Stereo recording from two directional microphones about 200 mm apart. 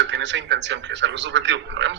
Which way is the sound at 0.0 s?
65° right (ahead or behind).